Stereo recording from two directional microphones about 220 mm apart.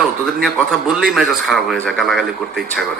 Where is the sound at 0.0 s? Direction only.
Centre (ahead or behind).